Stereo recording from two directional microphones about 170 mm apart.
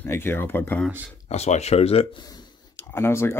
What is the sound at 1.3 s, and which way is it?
Speech, 40° left (ahead or behind).